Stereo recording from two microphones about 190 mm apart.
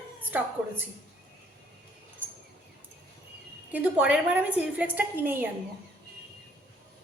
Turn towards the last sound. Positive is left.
turn(degrees=-10)  # may be behind; listen again after turning